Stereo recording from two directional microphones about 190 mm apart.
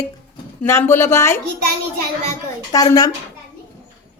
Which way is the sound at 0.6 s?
15° left (ahead or behind).